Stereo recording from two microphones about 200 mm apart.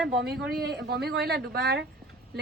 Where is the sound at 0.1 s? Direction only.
50° right (ahead or behind).